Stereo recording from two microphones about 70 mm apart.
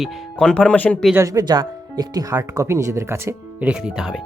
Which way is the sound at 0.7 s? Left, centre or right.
Left.